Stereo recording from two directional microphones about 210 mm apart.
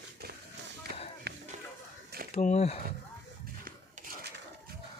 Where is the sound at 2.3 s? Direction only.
30° left (ahead or behind).